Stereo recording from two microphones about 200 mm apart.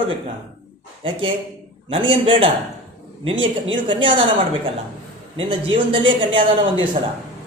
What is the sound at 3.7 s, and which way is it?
A man's voice, 25° right (ahead or behind).